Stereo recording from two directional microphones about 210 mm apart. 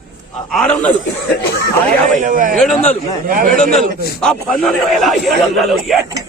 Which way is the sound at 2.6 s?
Centre (ahead or behind).